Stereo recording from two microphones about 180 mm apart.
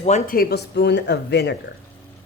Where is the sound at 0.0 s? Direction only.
40° left (ahead or behind).